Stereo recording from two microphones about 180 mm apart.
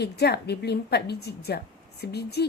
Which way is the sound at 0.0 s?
65° left (ahead or behind).